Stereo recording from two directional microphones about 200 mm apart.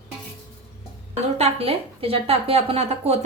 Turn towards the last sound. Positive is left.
turn(degrees=-30)  # may be behind; listen again after turning